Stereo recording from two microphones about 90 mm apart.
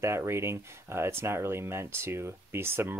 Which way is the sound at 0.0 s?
30° right (ahead or behind).